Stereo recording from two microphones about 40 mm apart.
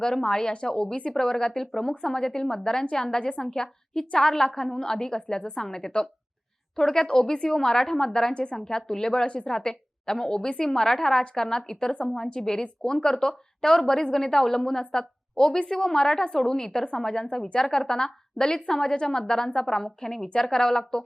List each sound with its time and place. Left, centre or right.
0.0 s a woman's voice: centre
8.3 s a woman's voice: left
8.5 s a woman's voice: centre
9.2 s a woman's voice: left
9.5 s a woman's voice: centre